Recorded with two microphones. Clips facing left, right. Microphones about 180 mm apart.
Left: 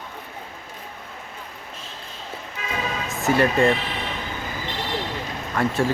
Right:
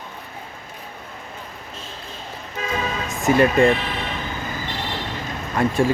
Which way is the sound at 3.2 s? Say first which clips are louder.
Right 3 dB; 15° right (ahead or behind).